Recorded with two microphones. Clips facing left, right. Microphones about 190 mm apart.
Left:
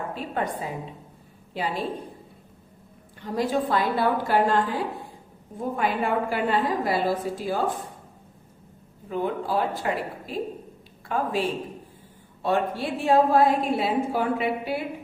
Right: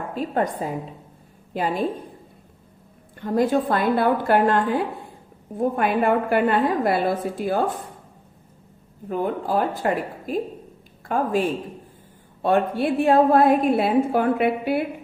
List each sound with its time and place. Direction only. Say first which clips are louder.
0.1 s speech: right 5 dB; 45° right (ahead or behind)
3.2 s a woman's voice: right 5 dB; 50° right (ahead or behind)
9.0 s a woman's voice: right 3 dB; 50° right (ahead or behind)